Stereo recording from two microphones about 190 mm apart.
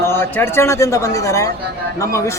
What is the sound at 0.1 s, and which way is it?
A man's voice, 10° left (ahead or behind).